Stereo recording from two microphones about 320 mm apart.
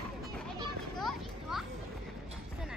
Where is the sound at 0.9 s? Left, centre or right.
Centre.